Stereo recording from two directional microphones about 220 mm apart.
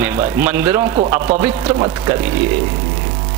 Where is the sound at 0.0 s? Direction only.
10° right (ahead or behind).